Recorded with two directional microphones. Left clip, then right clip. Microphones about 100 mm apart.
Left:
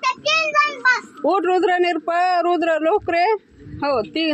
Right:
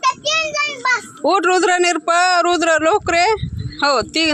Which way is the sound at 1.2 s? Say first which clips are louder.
Right 3 dB; 25° right (ahead or behind).